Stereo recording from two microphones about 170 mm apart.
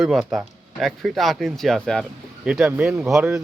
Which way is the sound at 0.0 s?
Centre (ahead or behind).